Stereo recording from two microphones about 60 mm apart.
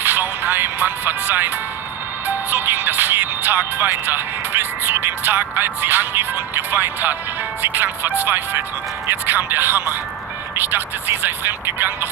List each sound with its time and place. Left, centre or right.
0.0 s speech: right